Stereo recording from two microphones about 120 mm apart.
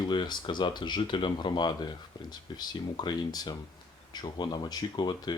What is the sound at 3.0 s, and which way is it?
Speech, 35° left (ahead or behind).